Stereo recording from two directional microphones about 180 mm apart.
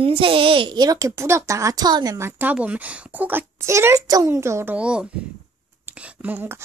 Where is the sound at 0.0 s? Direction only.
30° right (ahead or behind).